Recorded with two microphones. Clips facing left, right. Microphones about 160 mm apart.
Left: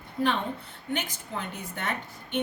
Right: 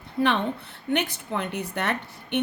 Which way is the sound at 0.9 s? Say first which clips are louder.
Right 6 dB; 65° right (ahead or behind).